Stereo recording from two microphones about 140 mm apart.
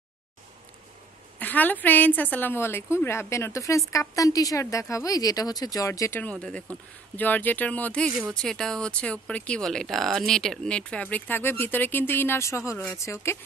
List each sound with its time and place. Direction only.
1.4 s speech: 10° left (ahead or behind)